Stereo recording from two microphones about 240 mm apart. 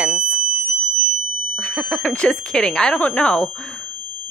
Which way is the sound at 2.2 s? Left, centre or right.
Centre.